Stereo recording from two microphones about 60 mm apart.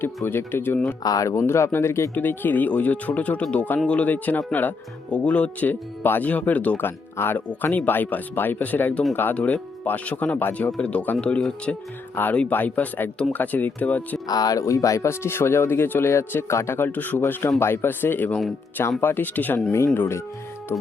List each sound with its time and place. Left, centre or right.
0.3 s speech: left
1.0 s speech: left
1.5 s speech: left
2.1 s speech: left
14.3 s speech: left
14.6 s speech: left
19.7 s speech: left